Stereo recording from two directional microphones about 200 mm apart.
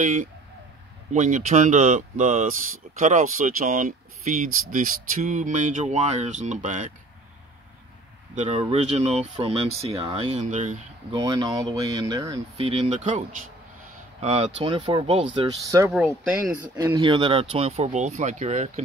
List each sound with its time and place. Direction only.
0.0 s speech: 40° right (ahead or behind)
8.5 s speech: 30° right (ahead or behind)
11.1 s speech: 20° right (ahead or behind)
12.5 s speech: 30° right (ahead or behind); by 16.7 s 5° right (ahead or behind)
16.7 s speech: 20° right (ahead or behind); by 18.7 s 35° right (ahead or behind)